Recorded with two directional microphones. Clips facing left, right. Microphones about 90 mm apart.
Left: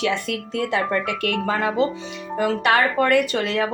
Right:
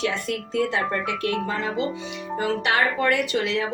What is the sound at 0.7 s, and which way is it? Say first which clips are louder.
Speech: left 3 dB; 65° left (ahead or behind).